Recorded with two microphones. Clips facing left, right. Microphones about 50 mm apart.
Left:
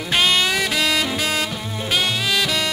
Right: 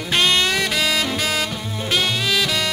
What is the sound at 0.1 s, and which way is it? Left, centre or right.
Music, centre.